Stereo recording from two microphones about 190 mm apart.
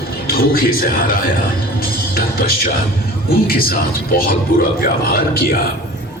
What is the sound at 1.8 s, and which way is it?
Music, 50° left (ahead or behind).